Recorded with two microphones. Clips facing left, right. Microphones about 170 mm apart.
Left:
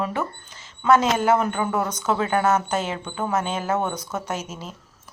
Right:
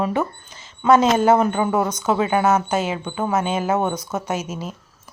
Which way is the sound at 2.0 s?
10° right (ahead or behind).